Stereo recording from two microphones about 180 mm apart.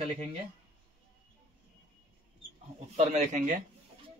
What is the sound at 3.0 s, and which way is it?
Speech, 40° right (ahead or behind).